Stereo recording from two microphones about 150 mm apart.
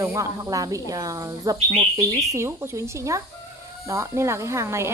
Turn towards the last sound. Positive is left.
turn(degrees=-20)  # may be behind; listen again after turning